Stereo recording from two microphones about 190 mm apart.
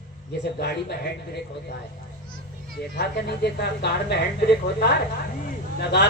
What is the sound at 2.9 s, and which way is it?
Speech, 55° left (ahead or behind).